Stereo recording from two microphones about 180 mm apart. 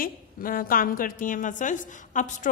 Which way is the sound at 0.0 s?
50° left (ahead or behind).